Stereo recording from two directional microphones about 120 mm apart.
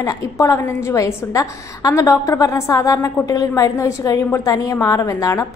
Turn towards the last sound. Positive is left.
turn(degrees=30)  # may be behind; listen again after turning